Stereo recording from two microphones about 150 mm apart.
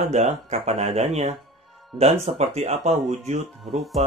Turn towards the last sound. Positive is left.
turn(degrees=0)  # may be behind; listen again after turning